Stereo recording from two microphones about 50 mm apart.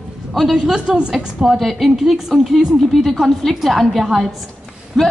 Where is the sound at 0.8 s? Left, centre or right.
Centre.